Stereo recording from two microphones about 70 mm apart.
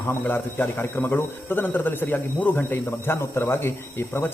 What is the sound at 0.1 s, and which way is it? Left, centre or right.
Speech, left.